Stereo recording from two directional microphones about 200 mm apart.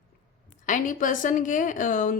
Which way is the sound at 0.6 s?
40° left (ahead or behind).